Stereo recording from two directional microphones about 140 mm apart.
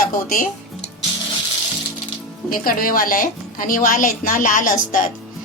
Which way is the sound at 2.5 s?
90° left.